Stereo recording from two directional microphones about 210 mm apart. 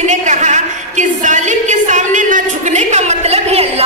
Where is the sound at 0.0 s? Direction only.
35° right (ahead or behind).